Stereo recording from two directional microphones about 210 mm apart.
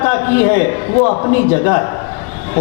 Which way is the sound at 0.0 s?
15° left (ahead or behind).